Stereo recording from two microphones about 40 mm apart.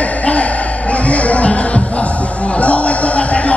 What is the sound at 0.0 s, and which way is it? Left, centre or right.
Music, left.